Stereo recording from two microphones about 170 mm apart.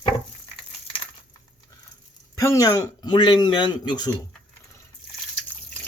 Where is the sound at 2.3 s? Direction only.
20° left (ahead or behind).